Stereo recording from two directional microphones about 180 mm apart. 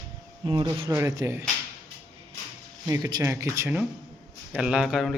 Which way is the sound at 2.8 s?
20° right (ahead or behind).